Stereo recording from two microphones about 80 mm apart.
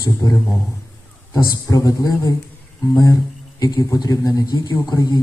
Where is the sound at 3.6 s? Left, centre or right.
Left.